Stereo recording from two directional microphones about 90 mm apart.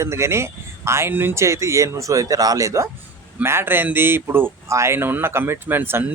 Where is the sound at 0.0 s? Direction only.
30° right (ahead or behind).